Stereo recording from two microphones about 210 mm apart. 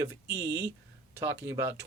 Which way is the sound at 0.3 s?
15° right (ahead or behind).